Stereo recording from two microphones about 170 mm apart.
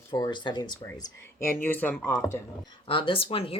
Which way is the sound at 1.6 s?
10° left (ahead or behind).